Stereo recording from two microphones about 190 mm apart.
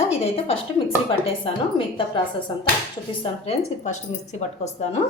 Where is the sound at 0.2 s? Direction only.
30° left (ahead or behind).